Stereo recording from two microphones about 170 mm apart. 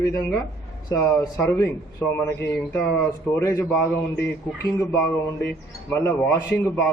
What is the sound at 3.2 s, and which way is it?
A man's voice, 15° left (ahead or behind).